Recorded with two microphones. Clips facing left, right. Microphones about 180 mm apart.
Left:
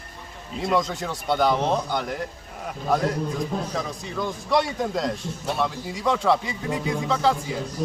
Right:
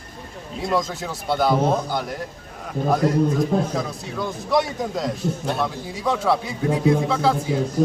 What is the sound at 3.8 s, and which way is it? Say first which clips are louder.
A man's voice: right 2 dB; 5° right (ahead or behind).